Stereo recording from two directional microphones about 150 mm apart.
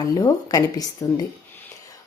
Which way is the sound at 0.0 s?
25° left (ahead or behind).